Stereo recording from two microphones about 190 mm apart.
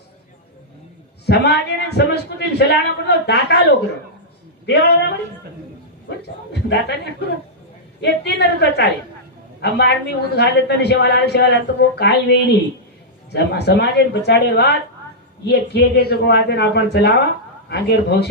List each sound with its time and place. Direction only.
1.3 s a woman's voice: 60° left (ahead or behind)
6.5 s a woman's voice: 60° left (ahead or behind)